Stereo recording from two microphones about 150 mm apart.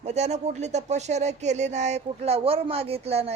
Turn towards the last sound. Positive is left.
turn(degrees=-40)  # may be behind; listen again after turning